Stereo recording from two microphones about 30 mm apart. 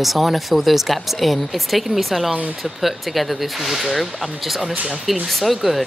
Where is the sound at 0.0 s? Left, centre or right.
Centre.